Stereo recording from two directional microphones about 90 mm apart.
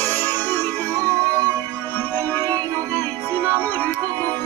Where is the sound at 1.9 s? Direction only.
25° left (ahead or behind).